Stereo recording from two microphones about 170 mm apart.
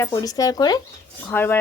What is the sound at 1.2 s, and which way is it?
Speech, 10° left (ahead or behind).